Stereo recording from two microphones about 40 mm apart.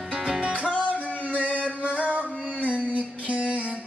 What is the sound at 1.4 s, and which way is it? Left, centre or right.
Music, right.